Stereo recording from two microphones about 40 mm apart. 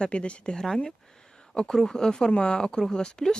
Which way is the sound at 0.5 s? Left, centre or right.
Centre.